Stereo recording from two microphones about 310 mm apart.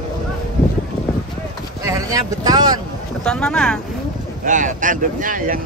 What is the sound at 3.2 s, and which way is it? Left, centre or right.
Speech, centre.